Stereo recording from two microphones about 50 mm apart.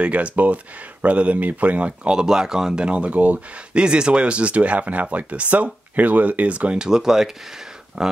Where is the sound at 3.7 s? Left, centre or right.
Centre.